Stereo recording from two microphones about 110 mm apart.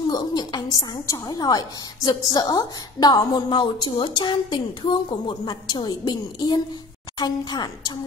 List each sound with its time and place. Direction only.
0.1 s a woman's voice: 40° left (ahead or behind)